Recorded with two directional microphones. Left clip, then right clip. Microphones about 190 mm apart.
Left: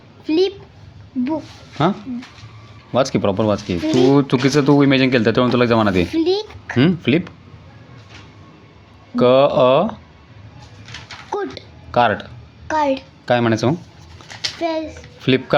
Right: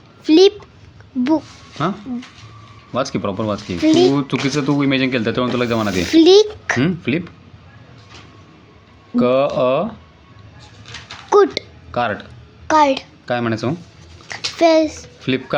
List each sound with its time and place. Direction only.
0.3 s a child's voice: 65° right (ahead or behind)
1.8 s speech: 30° left (ahead or behind)
6.1 s speech: 65° right (ahead or behind)
6.7 s speech: 25° left (ahead or behind)
9.1 s speech: 30° left (ahead or behind)
11.3 s a sound: 60° right (ahead or behind)
11.9 s speech: 30° left (ahead or behind)
12.6 s a child's voice: 50° right (ahead or behind)
13.2 s speech: 30° left (ahead or behind)
14.6 s a child's voice: 65° right (ahead or behind)
15.2 s speech: 25° left (ahead or behind)